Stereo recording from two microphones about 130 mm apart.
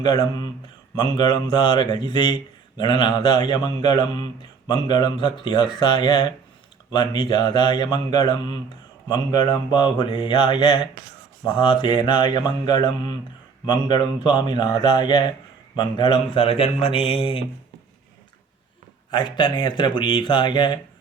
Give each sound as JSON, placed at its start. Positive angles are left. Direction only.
{"t": 0.0, "sound": "speech", "side_deg": 30}
{"t": 19.1, "sound": "speech", "side_deg": 35}